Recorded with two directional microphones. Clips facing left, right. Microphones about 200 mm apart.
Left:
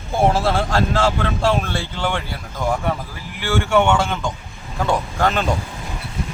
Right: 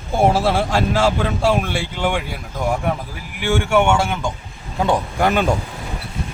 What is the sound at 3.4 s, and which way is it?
Speech, 10° right (ahead or behind).